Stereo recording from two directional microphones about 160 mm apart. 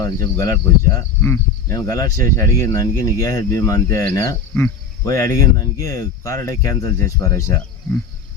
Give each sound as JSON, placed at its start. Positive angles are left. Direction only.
{"t": 0.0, "sound": "speech", "side_deg": 20}